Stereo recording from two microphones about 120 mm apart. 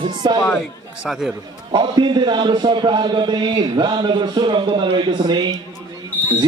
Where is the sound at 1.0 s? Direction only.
5° right (ahead or behind).